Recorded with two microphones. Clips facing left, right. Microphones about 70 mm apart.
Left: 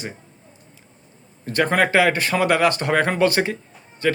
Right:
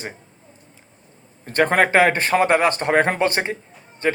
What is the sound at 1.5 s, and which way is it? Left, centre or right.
Speech, right.